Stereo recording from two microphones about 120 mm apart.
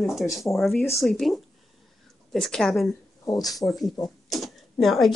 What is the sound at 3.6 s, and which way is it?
Speech, centre (ahead or behind).